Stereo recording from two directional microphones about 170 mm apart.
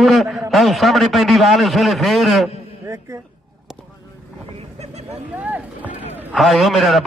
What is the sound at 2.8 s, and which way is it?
Music, 20° right (ahead or behind).